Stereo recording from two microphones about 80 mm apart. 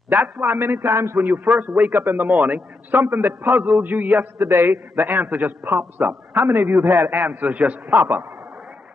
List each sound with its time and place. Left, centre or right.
0.1 s a man's voice: right